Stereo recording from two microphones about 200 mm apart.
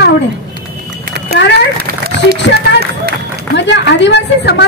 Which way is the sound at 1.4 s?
60° left (ahead or behind).